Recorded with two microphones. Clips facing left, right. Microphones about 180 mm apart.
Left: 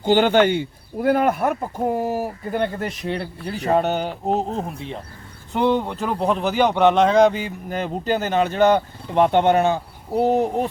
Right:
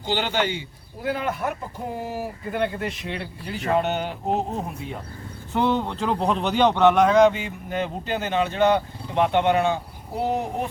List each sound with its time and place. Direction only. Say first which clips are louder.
0.0 s speech: left 9 dB; 50° left (ahead or behind)
5.5 s a man's voice: left 3 dB; 15° left (ahead or behind); by 10.4 s 40° left (ahead or behind)